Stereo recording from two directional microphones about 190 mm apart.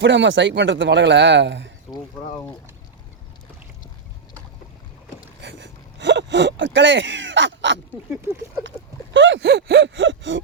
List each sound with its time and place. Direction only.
0.0 s a man's voice: 70° right (ahead or behind)
5.4 s gasp: 65° right (ahead or behind)
9.1 s a man's voice: 75° right (ahead or behind)